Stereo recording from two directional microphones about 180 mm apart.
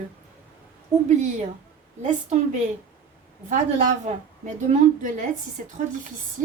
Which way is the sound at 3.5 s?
45° right (ahead or behind).